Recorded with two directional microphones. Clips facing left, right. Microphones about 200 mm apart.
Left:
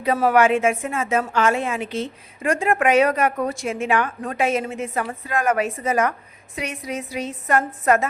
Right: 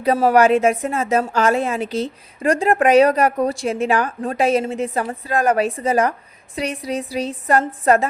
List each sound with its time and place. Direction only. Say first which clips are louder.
0.0 s a woman's voice: right 3 dB; 35° right (ahead or behind)